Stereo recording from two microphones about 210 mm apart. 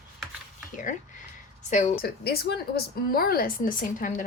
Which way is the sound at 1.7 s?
40° left (ahead or behind).